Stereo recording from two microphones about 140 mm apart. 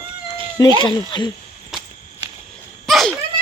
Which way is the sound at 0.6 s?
30° left (ahead or behind).